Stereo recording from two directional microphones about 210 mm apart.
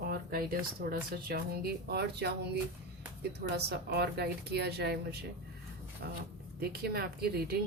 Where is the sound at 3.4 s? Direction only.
50° right (ahead or behind).